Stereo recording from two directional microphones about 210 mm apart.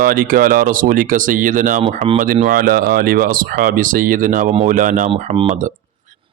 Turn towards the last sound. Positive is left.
turn(degrees=-35)  # may be behind; listen again after turning